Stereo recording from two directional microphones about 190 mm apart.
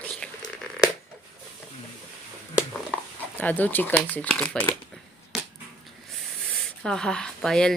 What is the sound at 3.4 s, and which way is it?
Speech, 10° left (ahead or behind).